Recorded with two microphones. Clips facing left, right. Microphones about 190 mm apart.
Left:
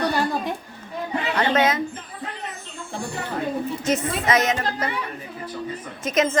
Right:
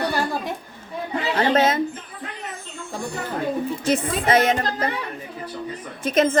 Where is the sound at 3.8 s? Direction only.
30° right (ahead or behind).